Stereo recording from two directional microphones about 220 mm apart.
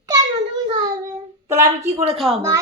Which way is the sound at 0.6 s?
20° right (ahead or behind).